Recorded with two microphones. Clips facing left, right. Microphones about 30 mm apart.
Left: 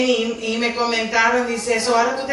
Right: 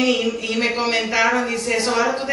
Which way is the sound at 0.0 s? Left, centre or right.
Right.